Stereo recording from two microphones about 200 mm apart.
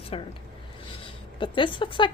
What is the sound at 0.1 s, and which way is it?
Speech, 30° left (ahead or behind).